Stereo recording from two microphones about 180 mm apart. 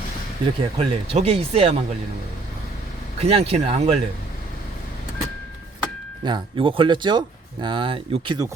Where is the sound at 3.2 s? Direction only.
35° right (ahead or behind).